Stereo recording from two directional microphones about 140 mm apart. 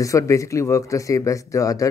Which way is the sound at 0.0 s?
20° left (ahead or behind).